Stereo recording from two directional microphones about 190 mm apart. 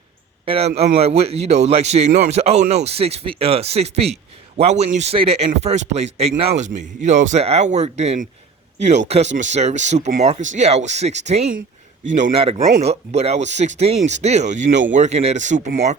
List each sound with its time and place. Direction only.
0.4 s a man's voice: 30° right (ahead or behind)